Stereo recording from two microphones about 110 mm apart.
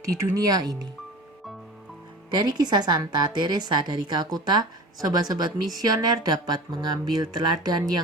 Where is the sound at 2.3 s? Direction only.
40° right (ahead or behind).